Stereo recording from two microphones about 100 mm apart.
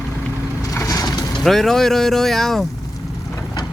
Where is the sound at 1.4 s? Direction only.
5° left (ahead or behind).